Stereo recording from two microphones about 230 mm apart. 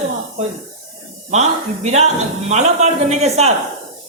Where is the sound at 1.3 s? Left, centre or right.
Right.